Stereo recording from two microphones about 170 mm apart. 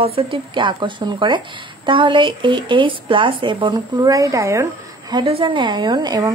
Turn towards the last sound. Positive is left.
turn(degrees=-25)  # may be behind; listen again after turning